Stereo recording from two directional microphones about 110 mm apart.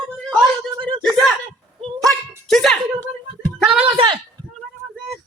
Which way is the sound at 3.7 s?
10° right (ahead or behind).